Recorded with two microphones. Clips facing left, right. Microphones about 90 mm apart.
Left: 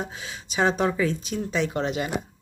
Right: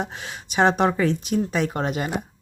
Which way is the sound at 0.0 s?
55° right (ahead or behind).